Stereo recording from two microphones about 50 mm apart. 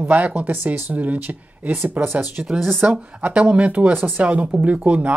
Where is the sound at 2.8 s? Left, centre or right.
Right.